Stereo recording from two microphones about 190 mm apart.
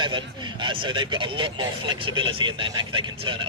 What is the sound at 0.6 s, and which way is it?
A man's voice, 25° right (ahead or behind).